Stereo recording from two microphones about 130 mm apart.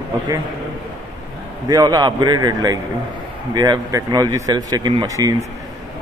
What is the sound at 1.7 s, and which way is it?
A man's voice, 30° right (ahead or behind).